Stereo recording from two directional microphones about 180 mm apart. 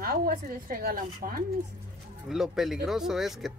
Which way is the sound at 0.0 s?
55° right (ahead or behind).